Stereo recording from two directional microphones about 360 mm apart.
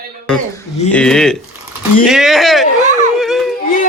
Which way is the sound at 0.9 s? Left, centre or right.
Centre.